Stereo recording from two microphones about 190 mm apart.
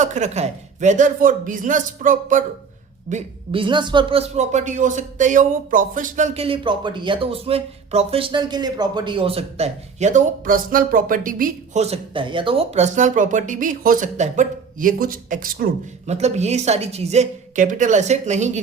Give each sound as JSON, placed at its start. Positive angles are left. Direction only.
{"t": 0.0, "sound": "speech", "side_deg": -40}
{"t": 3.1, "sound": "speech", "side_deg": -30}
{"t": 16.0, "sound": "speech", "side_deg": -35}